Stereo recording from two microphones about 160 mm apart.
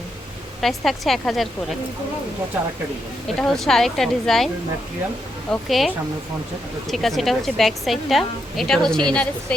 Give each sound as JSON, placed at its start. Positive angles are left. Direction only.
{"t": 0.6, "sound": "a woman's voice", "side_deg": 0}
{"t": 3.3, "sound": "a woman's voice", "side_deg": 0}
{"t": 5.5, "sound": "a woman's voice", "side_deg": 0}
{"t": 6.9, "sound": "a woman's voice", "side_deg": 0}